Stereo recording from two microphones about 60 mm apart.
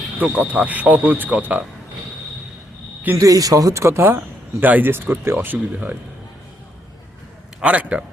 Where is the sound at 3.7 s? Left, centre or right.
Right.